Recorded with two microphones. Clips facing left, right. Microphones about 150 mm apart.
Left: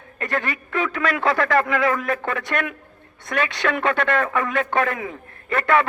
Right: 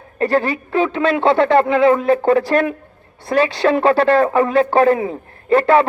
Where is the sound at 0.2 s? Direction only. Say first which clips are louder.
Right 9 dB; 30° right (ahead or behind).